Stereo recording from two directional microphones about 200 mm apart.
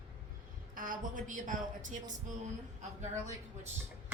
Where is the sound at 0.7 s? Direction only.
45° right (ahead or behind).